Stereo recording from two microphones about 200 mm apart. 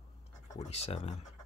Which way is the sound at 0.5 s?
30° left (ahead or behind).